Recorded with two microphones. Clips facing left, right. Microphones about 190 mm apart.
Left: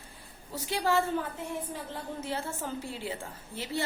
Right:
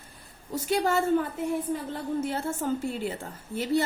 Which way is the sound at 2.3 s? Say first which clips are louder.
Right 6 dB; 45° right (ahead or behind).